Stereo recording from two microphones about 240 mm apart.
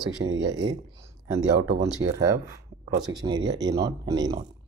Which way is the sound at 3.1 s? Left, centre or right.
Centre.